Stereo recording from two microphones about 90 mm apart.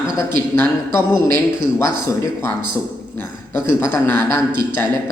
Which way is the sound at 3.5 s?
30° left (ahead or behind).